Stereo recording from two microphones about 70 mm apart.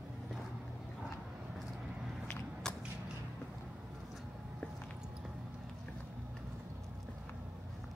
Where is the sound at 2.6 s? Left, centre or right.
Centre.